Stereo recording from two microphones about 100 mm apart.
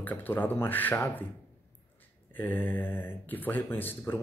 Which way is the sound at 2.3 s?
20° left (ahead or behind).